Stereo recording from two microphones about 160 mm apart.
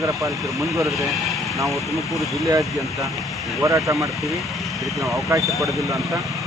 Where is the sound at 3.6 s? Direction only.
20° right (ahead or behind).